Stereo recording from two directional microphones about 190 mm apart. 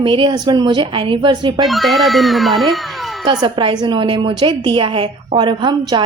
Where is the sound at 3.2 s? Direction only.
25° right (ahead or behind).